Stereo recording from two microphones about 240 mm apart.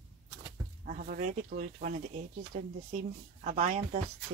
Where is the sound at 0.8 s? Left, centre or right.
Right.